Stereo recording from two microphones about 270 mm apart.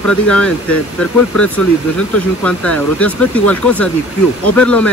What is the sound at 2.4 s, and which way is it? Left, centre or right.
Speech, centre.